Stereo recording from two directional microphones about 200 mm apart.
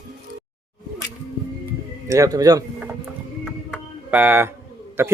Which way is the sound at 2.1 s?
15° right (ahead or behind).